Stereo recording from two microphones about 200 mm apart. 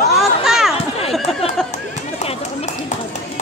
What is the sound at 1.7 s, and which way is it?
Run, 30° left (ahead or behind).